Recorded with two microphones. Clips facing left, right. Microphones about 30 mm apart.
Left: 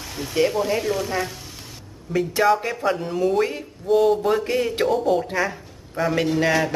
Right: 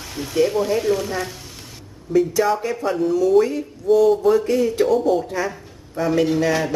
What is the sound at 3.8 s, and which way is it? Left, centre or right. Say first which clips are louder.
Speech: right 3 dB; centre.